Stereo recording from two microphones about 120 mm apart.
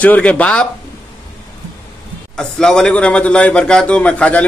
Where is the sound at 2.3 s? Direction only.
5° left (ahead or behind).